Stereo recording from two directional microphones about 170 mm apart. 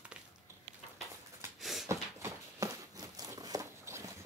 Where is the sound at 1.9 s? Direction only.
20° right (ahead or behind).